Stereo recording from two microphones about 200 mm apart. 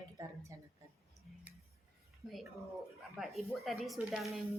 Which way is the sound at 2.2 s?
Centre (ahead or behind).